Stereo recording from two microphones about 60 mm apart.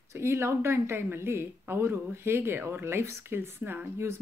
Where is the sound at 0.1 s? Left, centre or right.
Right.